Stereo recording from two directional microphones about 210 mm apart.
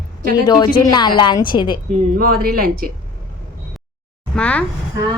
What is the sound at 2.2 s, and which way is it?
Speech, 45° right (ahead or behind).